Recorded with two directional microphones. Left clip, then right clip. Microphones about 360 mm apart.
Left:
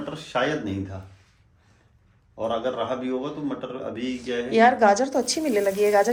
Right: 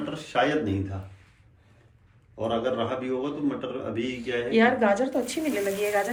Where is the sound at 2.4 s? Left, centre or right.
Left.